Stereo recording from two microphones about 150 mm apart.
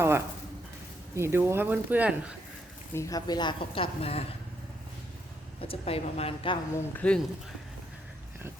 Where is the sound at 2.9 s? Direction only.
20° left (ahead or behind); by 4.2 s 40° left (ahead or behind).